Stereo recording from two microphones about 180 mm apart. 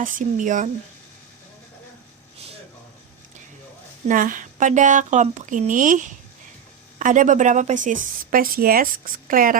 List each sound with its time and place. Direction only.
0.0 s speech: 45° right (ahead or behind)
4.1 s speech: 45° right (ahead or behind)